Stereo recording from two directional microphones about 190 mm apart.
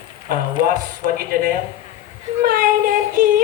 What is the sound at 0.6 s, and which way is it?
Speech, 50° right (ahead or behind).